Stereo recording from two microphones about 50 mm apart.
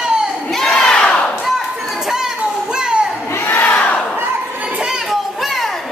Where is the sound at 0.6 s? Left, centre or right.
Centre.